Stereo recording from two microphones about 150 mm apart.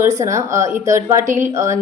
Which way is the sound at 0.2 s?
20° right (ahead or behind).